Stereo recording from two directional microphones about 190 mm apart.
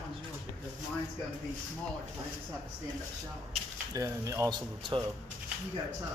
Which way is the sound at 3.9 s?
15° right (ahead or behind).